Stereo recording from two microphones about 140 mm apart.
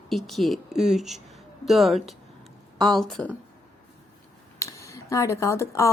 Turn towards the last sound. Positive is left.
turn(degrees=20)  # may be behind; listen again after turning